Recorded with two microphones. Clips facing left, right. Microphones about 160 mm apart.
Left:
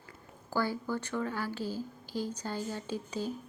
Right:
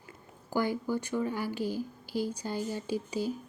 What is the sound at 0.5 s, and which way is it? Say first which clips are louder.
Speech: right 2 dB; 15° right (ahead or behind).